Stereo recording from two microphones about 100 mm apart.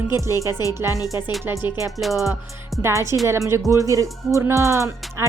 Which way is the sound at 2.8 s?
30° right (ahead or behind).